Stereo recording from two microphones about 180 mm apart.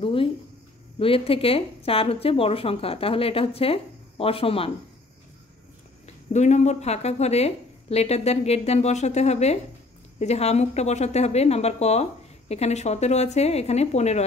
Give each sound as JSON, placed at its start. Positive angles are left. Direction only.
{"t": 0.0, "sound": "a sound", "side_deg": 30}
{"t": 0.9, "sound": "speech", "side_deg": 30}
{"t": 6.0, "sound": "speech", "side_deg": 40}